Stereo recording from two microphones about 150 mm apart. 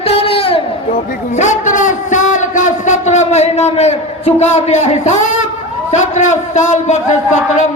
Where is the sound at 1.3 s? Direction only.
55° left (ahead or behind).